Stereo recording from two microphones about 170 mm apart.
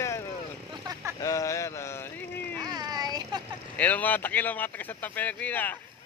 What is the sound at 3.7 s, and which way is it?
Speech, 10° left (ahead or behind).